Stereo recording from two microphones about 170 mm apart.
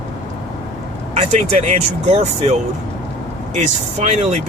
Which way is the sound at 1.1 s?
40° right (ahead or behind).